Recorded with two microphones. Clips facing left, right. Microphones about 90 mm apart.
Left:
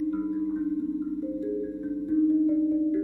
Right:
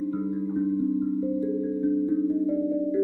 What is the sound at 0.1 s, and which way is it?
Music, 5° right (ahead or behind).